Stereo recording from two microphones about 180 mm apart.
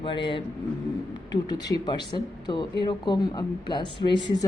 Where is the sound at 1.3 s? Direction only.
25° left (ahead or behind).